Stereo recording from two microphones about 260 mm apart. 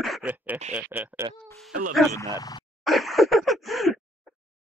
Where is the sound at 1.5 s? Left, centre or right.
Centre.